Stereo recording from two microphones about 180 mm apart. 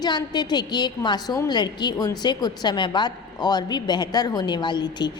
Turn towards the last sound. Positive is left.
turn(degrees=25)  # may be behind; listen again after turning